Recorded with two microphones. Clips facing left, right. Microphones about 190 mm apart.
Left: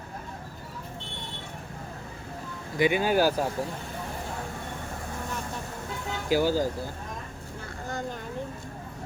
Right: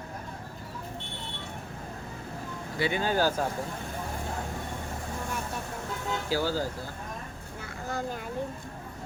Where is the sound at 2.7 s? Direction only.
15° left (ahead or behind).